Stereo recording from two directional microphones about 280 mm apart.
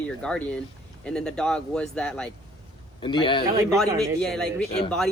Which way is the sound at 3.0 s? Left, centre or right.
Centre.